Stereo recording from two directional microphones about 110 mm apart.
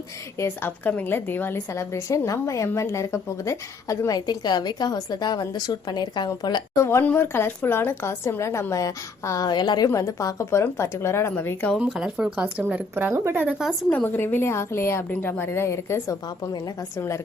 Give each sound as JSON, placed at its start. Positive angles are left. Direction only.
{"t": 0.3, "sound": "a woman's voice", "side_deg": 20}
{"t": 6.7, "sound": "a woman's voice", "side_deg": 25}
{"t": 11.8, "sound": "speech", "side_deg": -5}
{"t": 13.9, "sound": "a woman's voice", "side_deg": 20}